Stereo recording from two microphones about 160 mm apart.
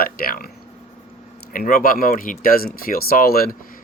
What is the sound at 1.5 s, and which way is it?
Speech, 65° left (ahead or behind).